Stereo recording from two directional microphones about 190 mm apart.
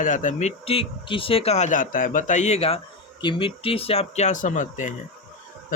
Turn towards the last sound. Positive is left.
turn(degrees=40)  # may be behind; listen again after turning